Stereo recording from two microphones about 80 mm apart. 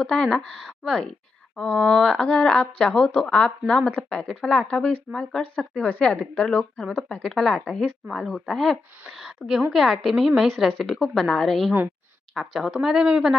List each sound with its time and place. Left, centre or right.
0.0 s a woman's voice: centre